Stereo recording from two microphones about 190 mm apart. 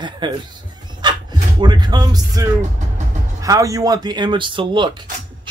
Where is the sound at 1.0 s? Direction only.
25° right (ahead or behind).